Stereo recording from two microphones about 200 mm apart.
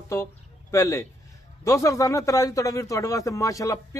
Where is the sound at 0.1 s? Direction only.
15° left (ahead or behind).